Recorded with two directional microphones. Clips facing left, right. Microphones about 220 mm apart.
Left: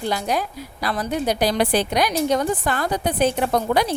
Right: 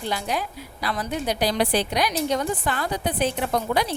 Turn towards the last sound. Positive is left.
turn(degrees=45)  # may be behind; listen again after turning